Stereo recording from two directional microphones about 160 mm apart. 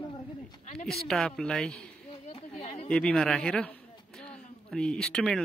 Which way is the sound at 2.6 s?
40° left (ahead or behind).